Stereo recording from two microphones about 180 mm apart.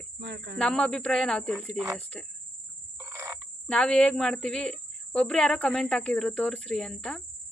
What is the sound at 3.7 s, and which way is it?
Speech, 5° left (ahead or behind).